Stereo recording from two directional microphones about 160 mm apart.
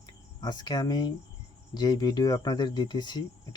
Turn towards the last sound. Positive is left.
turn(degrees=25)  # may be behind; listen again after turning